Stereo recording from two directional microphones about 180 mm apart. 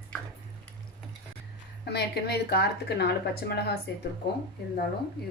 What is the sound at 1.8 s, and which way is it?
Speech, 65° left (ahead or behind).